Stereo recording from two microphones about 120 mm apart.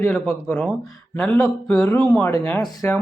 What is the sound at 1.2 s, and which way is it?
Speech, 5° left (ahead or behind).